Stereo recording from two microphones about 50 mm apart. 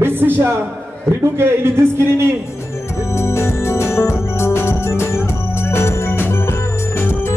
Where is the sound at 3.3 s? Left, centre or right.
Left.